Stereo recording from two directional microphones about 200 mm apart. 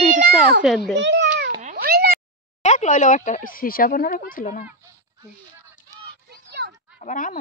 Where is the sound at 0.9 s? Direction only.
60° right (ahead or behind).